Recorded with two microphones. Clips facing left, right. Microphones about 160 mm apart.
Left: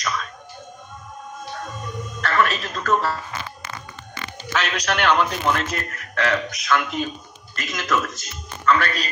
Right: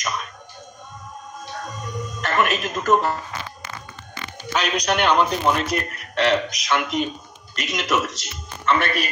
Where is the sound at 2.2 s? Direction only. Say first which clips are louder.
Even; 20° right (ahead or behind).